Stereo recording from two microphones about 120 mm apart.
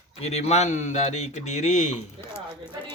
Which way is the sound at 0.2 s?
60° left (ahead or behind).